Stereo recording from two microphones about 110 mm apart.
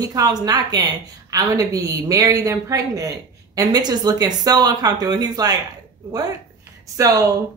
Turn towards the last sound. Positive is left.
turn(degrees=-30)  # may be behind; listen again after turning